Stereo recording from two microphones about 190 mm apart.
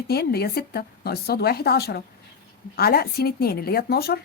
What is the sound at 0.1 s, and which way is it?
Speech, 55° left (ahead or behind).